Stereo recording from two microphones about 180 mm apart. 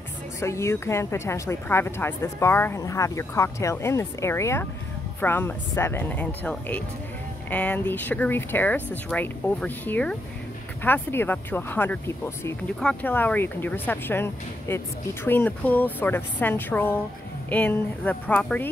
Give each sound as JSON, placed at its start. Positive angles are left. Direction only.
{"t": 0.4, "sound": "a woman's voice", "side_deg": 15}